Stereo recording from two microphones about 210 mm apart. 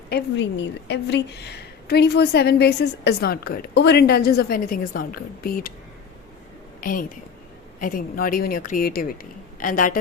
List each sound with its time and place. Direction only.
0.1 s a woman's voice: 55° left (ahead or behind)
6.8 s a woman's voice: 40° left (ahead or behind)